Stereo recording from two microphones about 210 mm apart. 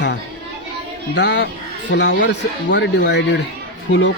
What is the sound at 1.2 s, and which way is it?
A man's voice, 55° left (ahead or behind).